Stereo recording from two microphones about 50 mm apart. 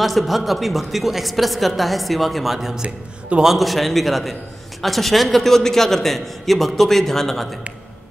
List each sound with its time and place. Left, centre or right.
0.0 s a woman's voice: centre
2.8 s a man's voice: centre
3.4 s a woman's voice: centre